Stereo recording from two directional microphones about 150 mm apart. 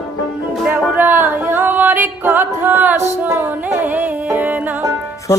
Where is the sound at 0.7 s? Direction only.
15° right (ahead or behind).